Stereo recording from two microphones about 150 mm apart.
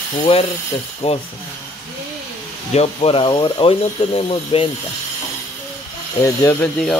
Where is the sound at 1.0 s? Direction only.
40° left (ahead or behind).